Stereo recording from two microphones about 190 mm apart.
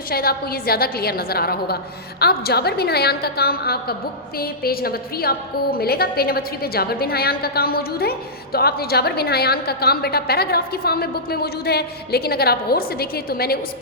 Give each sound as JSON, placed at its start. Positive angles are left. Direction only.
{"t": 0.1, "sound": "a woman's voice", "side_deg": 55}